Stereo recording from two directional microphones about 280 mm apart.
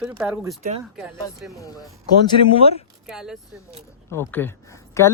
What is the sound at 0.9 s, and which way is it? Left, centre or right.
Speech, centre.